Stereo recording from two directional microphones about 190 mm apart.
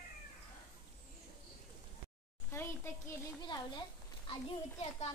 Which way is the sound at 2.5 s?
10° left (ahead or behind).